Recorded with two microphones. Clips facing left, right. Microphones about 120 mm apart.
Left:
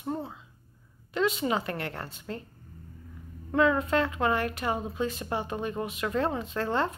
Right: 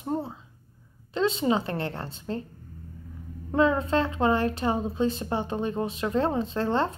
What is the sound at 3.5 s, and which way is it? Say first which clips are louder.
A woman's voice: right 1 dB; 30° right (ahead or behind).